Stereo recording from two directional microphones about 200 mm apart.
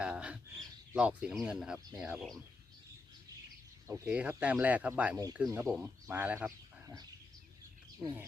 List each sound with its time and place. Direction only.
0.0 s bird: 5° right (ahead or behind)
0.9 s speech: 5° right (ahead or behind)
3.8 s speech: 15° right (ahead or behind)
5.1 s speech: 15° right (ahead or behind)